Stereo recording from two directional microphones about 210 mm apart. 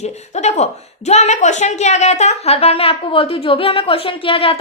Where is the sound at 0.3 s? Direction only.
35° left (ahead or behind).